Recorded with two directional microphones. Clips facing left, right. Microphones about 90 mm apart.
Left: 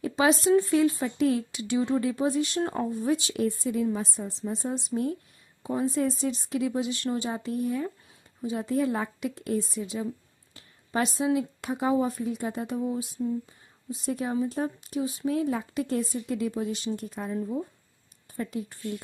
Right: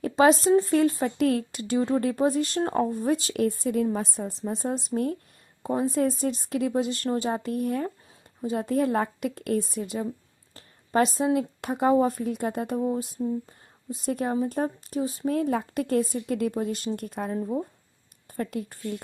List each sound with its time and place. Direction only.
0.0 s a woman's voice: 40° right (ahead or behind)
3.3 s a woman's voice: 55° right (ahead or behind); by 15.4 s 35° right (ahead or behind)
15.4 s a woman's voice: 50° right (ahead or behind)
17.3 s speech: 35° right (ahead or behind)
18.3 s a woman's voice: 55° right (ahead or behind)